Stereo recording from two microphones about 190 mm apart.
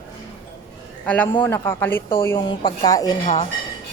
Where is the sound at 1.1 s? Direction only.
10° left (ahead or behind).